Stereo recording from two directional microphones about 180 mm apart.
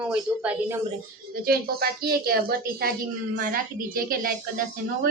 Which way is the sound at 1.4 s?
60° right (ahead or behind).